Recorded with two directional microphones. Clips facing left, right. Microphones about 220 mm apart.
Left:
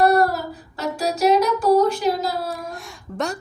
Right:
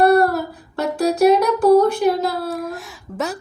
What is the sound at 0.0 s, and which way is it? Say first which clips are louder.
Female singing: right 3 dB; 60° right (ahead or behind).